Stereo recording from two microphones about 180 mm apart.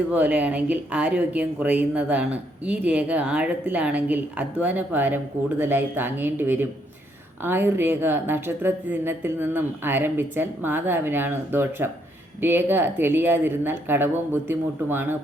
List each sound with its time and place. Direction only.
0.1 s speech: 10° right (ahead or behind)